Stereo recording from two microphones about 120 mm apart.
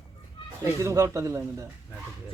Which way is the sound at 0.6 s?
25° right (ahead or behind).